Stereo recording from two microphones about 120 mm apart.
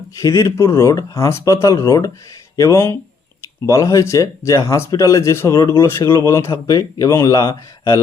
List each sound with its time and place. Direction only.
0.2 s speech: 25° left (ahead or behind)